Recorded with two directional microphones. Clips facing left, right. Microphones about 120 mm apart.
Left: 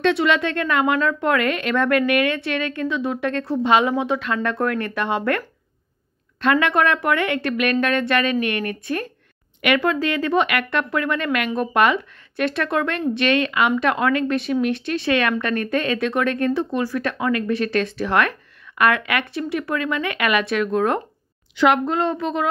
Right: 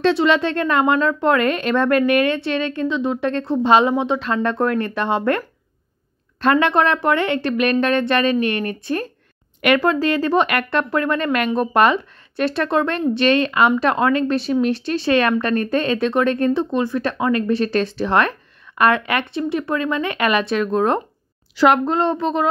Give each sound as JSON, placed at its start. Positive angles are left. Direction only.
{"t": 0.0, "sound": "speech", "side_deg": -30}
{"t": 6.4, "sound": "speech", "side_deg": -30}